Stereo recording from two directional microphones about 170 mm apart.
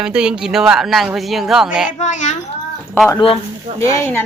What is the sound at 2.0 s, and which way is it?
Speech, 45° left (ahead or behind).